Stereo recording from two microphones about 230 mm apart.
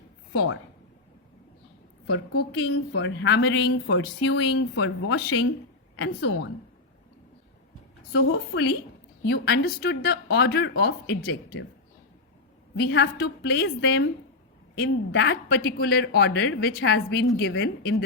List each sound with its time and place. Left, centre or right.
0.3 s a woman's voice: left
2.0 s a woman's voice: left
9.2 s speech: left
12.7 s speech: left